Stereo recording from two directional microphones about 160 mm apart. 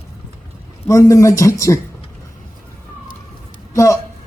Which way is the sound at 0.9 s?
20° left (ahead or behind).